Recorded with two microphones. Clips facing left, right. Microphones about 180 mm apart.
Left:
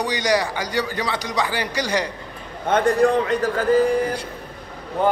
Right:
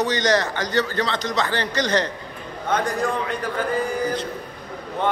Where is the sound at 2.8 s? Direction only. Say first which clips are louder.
Left 7 dB; 35° left (ahead or behind).